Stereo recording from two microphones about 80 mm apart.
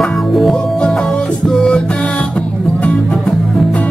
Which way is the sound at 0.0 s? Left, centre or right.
Centre.